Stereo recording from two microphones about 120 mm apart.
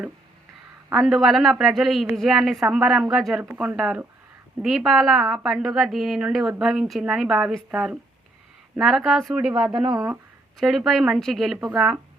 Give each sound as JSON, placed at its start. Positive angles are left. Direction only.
{"t": 0.9, "sound": "a woman's voice", "side_deg": 0}
{"t": 3.4, "sound": "a woman's voice", "side_deg": -15}
{"t": 9.8, "sound": "speech", "side_deg": -35}
{"t": 10.6, "sound": "a woman's voice", "side_deg": 0}